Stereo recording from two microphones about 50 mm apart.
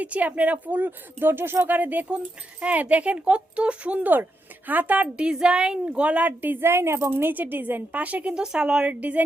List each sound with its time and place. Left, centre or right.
0.0 s a woman's voice: right
1.6 s a woman's voice: right
2.0 s speech: right
4.1 s a woman's voice: right
5.1 s speech: centre; by 6.6 s right
6.6 s a woman's voice: right
7.1 s a woman's voice: right
8.9 s a woman's voice: right